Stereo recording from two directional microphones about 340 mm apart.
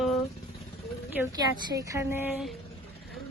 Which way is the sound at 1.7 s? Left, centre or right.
Centre.